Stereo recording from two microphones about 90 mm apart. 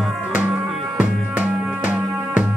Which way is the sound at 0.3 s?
15° right (ahead or behind).